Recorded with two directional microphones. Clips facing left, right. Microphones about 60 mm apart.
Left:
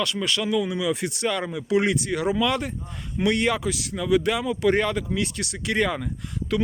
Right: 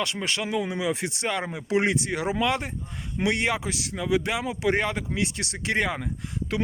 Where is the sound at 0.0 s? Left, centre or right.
Right.